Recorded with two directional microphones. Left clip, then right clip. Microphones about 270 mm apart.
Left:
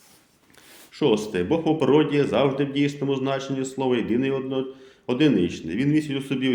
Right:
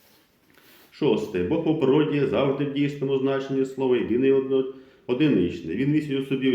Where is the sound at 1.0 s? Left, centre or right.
Left.